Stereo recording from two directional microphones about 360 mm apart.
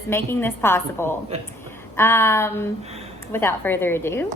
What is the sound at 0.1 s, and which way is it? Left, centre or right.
A woman's voice, centre.